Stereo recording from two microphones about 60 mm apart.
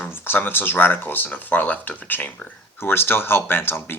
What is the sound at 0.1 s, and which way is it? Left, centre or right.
Speech, left.